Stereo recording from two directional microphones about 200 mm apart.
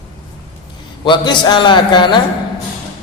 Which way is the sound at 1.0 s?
20° left (ahead or behind).